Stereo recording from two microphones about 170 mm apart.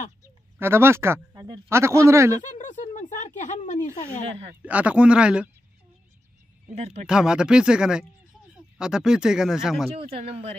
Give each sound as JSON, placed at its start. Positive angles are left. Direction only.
{"t": 0.2, "sound": "speech", "side_deg": -15}
{"t": 2.4, "sound": "a sound", "side_deg": 45}
{"t": 4.6, "sound": "speech", "side_deg": -10}
{"t": 6.7, "sound": "speech", "side_deg": -40}
{"t": 7.1, "sound": "speech", "side_deg": -5}
{"t": 9.8, "sound": "speech", "side_deg": -35}